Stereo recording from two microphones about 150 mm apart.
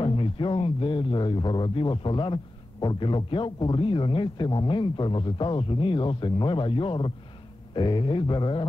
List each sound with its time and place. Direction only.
0.0 s speech: 35° left (ahead or behind)